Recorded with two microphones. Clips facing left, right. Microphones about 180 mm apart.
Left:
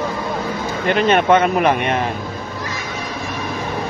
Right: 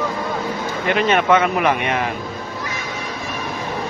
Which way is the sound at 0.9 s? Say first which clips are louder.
Left 2 dB; 35° left (ahead or behind).